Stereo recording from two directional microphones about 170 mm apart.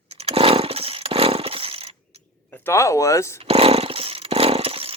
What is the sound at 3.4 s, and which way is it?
Chainsaw, 35° right (ahead or behind).